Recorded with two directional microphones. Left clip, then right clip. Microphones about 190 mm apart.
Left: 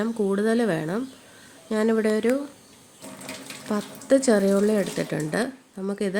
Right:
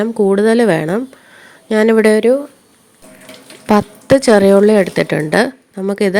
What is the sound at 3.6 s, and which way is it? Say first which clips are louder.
Speech: right 13 dB; 50° right (ahead or behind).